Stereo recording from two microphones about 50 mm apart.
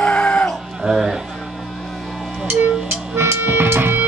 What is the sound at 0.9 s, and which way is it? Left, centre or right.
Music, centre.